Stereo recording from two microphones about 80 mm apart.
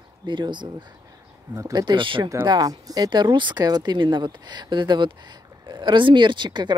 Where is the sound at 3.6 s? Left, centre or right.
Right.